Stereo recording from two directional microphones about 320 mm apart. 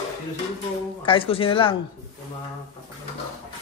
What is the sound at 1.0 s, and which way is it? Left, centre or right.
Speech, centre.